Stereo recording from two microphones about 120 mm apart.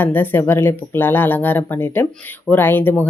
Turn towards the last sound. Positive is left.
turn(degrees=15)  # may be behind; listen again after turning